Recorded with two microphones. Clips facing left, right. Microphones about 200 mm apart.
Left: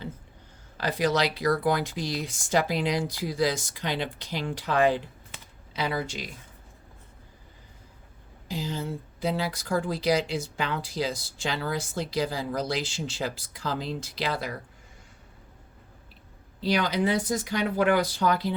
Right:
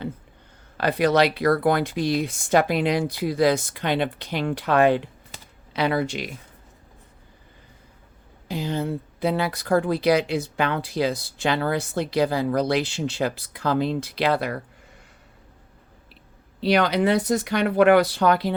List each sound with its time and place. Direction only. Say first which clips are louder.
0.8 s speech: right 6 dB; 60° right (ahead or behind)
5.3 s computer keyboard: right 1 dB; 40° right (ahead or behind)
5.7 s speech: right 7 dB; 65° right (ahead or behind)
8.4 s speech: right 6 dB; 60° right (ahead or behind)
16.6 s speech: right 5 dB; 65° right (ahead or behind)